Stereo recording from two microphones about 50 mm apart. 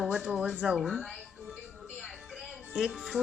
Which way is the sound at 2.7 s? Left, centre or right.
Centre.